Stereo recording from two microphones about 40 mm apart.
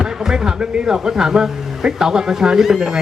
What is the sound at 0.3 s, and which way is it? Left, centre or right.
Speech, centre.